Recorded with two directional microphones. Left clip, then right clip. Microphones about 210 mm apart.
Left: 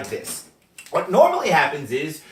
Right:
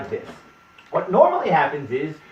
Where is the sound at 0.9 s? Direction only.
25° left (ahead or behind).